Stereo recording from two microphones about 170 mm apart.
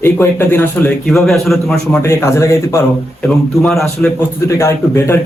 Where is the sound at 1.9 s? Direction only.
15° left (ahead or behind).